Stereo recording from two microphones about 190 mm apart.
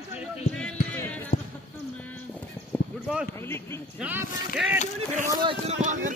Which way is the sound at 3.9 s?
10° right (ahead or behind).